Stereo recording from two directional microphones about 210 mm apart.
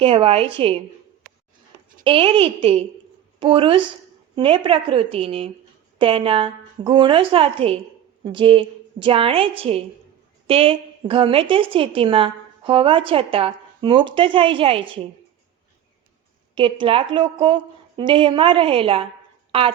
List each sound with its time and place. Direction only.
0.0 s a woman's voice: 30° right (ahead or behind)
2.0 s a woman's voice: 25° right (ahead or behind)
16.6 s a woman's voice: 25° right (ahead or behind)